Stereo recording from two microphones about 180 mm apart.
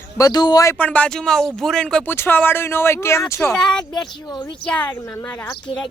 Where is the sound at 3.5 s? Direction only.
5° left (ahead or behind).